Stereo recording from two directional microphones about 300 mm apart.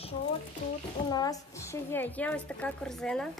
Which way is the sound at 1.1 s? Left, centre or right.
Centre.